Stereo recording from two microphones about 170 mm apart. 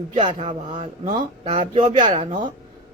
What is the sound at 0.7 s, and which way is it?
Speech, 45° right (ahead or behind).